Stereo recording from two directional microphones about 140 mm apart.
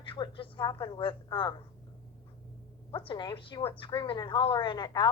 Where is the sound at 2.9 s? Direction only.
35° left (ahead or behind).